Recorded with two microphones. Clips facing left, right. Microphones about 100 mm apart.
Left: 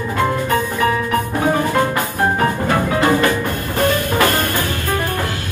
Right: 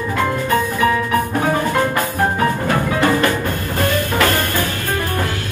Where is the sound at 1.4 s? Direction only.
20° left (ahead or behind).